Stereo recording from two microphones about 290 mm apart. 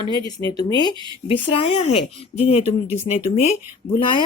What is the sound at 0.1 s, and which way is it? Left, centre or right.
Speech, centre.